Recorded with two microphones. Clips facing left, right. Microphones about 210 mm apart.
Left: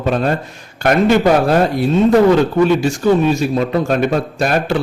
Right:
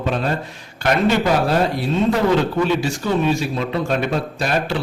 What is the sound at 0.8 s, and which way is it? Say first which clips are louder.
Speech: left 5 dB; 50° left (ahead or behind).